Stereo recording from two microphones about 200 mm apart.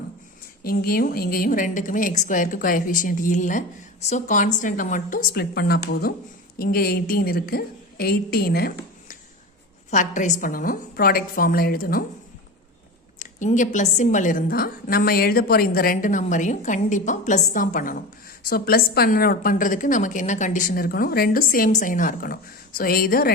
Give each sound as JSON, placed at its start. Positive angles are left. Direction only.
{"t": 0.6, "sound": "a woman's voice", "side_deg": 50}
{"t": 9.9, "sound": "a woman's voice", "side_deg": 40}
{"t": 13.1, "sound": "a woman's voice", "side_deg": 40}